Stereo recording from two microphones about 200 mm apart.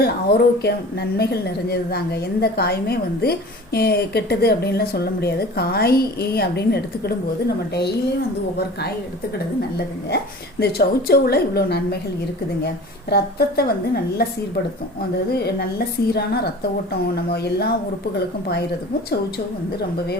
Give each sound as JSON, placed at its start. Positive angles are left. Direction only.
{"t": 0.0, "sound": "a woman's voice", "side_deg": 50}
{"t": 10.6, "sound": "a woman's voice", "side_deg": 50}
{"t": 13.1, "sound": "a woman's voice", "side_deg": 50}
{"t": 15.3, "sound": "a woman's voice", "side_deg": 50}